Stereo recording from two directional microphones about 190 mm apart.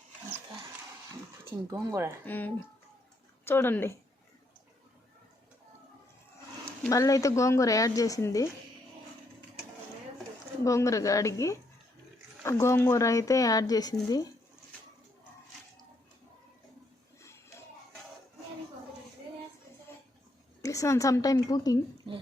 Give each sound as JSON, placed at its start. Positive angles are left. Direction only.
{"t": 1.5, "sound": "speech", "side_deg": -15}
{"t": 2.2, "sound": "speech", "side_deg": 10}
{"t": 6.7, "sound": "speech", "side_deg": 15}
{"t": 10.6, "sound": "speech", "side_deg": 15}
{"t": 20.6, "sound": "speech", "side_deg": 15}